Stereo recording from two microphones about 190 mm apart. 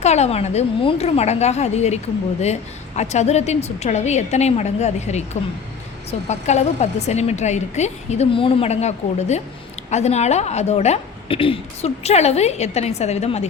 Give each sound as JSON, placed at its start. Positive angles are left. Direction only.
{"t": 0.0, "sound": "a woman's voice", "side_deg": 35}